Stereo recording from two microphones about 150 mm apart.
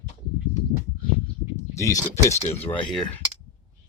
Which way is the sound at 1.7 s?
20° left (ahead or behind).